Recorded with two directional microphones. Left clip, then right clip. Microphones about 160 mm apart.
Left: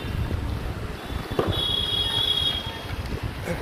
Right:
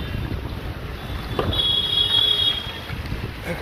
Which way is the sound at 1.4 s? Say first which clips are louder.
Even; 90° left.